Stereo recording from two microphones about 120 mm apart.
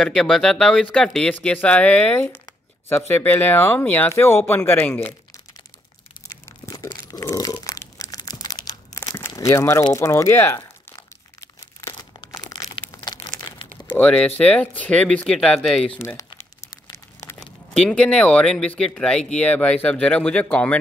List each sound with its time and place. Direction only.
0.0 s speech: 5° left (ahead or behind)
6.2 s a sound: 25° left (ahead or behind)
6.9 s crunch: 30° left (ahead or behind)
7.3 s crumpling: 30° left (ahead or behind)
9.3 s speech: 25° left (ahead or behind)
12.3 s crumpling: 30° left (ahead or behind)
13.9 s speech: 10° left (ahead or behind)
16.0 s speech: 20° left (ahead or behind)
16.9 s a sound: 25° left (ahead or behind)
17.7 s speech: 10° left (ahead or behind)